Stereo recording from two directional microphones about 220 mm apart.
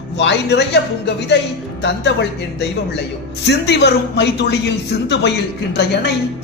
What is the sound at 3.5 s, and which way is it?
A woman's voice, 50° left (ahead or behind).